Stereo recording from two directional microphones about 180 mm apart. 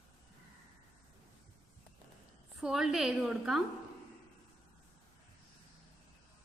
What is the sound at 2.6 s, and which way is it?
A woman's voice, centre (ahead or behind).